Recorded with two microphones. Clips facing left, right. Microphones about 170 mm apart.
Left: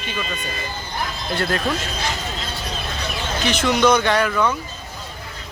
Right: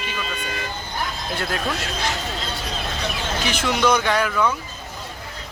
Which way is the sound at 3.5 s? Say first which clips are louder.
Left 3 dB; centre (ahead or behind).